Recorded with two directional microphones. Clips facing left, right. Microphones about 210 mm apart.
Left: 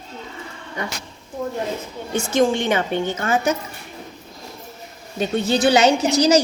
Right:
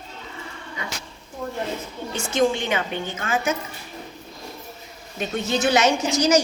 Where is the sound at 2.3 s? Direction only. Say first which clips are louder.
Left 3 dB; 40° left (ahead or behind).